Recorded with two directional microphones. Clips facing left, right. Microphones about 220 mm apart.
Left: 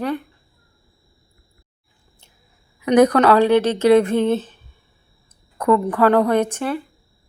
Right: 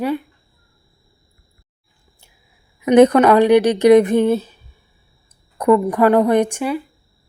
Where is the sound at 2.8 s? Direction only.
25° right (ahead or behind).